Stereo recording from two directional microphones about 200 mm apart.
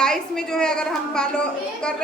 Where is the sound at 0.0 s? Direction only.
5° left (ahead or behind).